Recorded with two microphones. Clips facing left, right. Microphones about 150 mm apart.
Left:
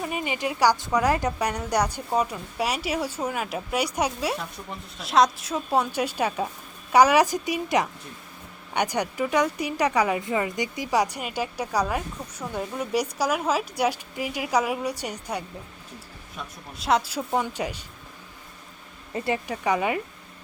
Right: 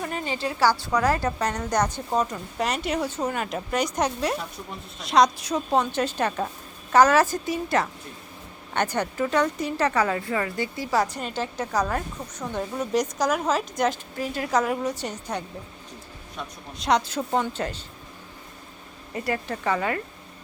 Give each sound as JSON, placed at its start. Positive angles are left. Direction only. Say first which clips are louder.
{"t": 0.0, "sound": "a woman's voice", "louder": "even", "side_deg": 10}
{"t": 16.7, "sound": "a woman's voice", "louder": "right 1 dB", "side_deg": 5}
{"t": 19.1, "sound": "speech", "louder": "left 1 dB", "side_deg": 25}
{"t": 19.5, "sound": "a woman's voice", "louder": "left 1 dB", "side_deg": 15}